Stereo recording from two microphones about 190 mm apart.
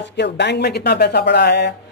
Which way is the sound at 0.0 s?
65° left (ahead or behind).